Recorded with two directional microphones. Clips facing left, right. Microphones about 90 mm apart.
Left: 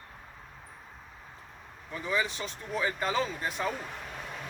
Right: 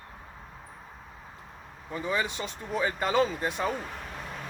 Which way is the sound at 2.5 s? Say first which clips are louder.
Right 2 dB; 20° right (ahead or behind).